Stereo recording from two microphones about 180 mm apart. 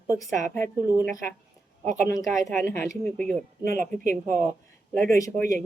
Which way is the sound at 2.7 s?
15° left (ahead or behind).